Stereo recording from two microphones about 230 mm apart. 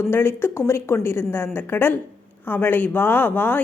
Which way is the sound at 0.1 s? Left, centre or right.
Centre.